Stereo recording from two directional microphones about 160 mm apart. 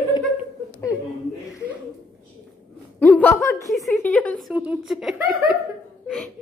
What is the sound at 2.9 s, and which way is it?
A woman's voice, 10° left (ahead or behind).